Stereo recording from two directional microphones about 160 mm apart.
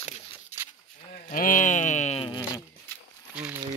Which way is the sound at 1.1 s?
55° left (ahead or behind).